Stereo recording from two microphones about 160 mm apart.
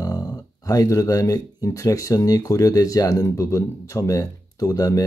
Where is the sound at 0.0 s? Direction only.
20° left (ahead or behind).